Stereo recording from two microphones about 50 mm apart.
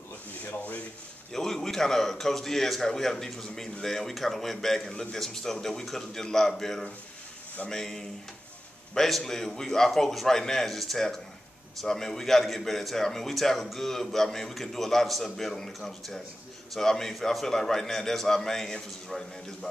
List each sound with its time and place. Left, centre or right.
0.5 s rub: left
1.3 s a man's voice: centre